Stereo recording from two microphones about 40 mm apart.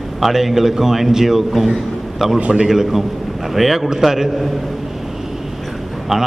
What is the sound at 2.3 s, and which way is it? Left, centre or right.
Speech, centre.